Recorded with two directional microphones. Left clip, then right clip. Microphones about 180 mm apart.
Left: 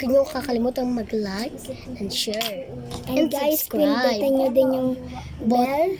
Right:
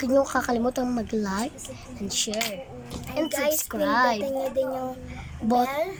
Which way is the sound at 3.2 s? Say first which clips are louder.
Even; 20° left (ahead or behind).